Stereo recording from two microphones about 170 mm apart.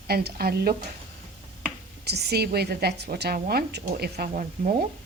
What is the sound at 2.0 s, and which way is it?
A woman's voice, 75° right (ahead or behind).